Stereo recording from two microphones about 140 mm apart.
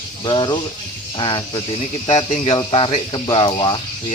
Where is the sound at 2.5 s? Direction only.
35° left (ahead or behind).